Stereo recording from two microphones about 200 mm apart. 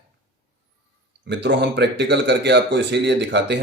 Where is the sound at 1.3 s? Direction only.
60° right (ahead or behind).